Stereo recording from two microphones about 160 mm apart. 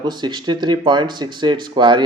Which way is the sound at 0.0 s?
30° right (ahead or behind).